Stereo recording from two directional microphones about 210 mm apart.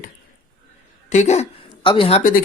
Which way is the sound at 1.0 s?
35° left (ahead or behind).